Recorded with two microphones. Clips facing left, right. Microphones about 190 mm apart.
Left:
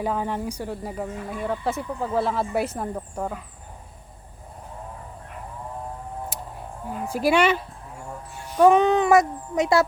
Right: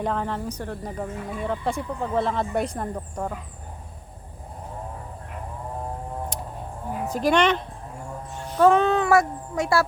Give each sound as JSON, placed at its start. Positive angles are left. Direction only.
{"t": 0.0, "sound": "speech", "side_deg": 10}
{"t": 7.1, "sound": "speech", "side_deg": 10}